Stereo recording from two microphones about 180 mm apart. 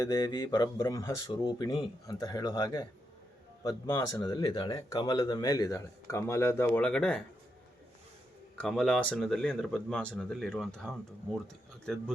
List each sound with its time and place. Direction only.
0.0 s speech: 20° left (ahead or behind)
8.6 s speech: centre (ahead or behind)